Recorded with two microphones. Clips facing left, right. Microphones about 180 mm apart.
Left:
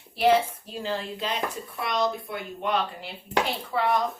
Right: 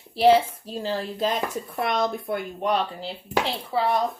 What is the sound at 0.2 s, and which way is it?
Speech, 35° right (ahead or behind).